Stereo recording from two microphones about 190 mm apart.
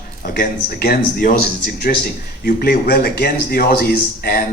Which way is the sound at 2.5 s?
50° left (ahead or behind).